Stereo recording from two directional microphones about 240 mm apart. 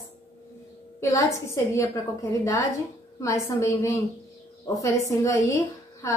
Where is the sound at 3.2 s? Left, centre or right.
Centre.